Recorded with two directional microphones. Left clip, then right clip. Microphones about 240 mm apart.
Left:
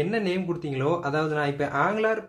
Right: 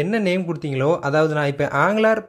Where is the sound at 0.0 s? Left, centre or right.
Right.